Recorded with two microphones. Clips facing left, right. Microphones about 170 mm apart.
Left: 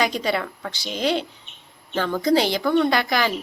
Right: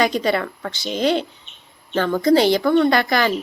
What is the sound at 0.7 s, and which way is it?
Speech, 55° right (ahead or behind).